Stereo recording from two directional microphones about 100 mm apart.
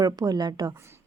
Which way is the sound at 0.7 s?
25° right (ahead or behind).